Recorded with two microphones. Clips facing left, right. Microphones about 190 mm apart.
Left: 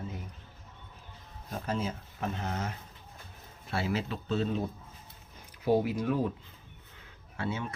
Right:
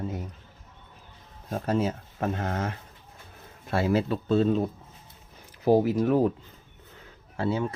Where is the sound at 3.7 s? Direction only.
45° right (ahead or behind).